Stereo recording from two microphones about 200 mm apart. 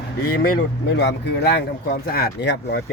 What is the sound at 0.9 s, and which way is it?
Speech, 55° left (ahead or behind).